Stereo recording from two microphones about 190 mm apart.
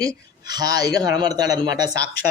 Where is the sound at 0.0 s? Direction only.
20° right (ahead or behind).